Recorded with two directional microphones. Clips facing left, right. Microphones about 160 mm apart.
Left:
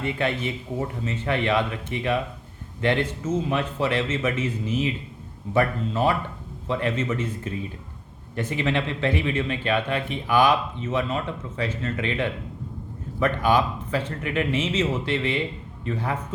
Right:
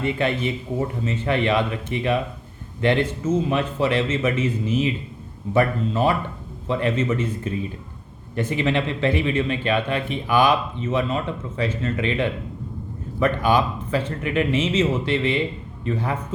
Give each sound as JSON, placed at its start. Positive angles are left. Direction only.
{"t": 0.0, "sound": "speech", "side_deg": -20}